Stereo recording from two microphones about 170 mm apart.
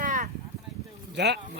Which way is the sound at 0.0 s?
55° right (ahead or behind).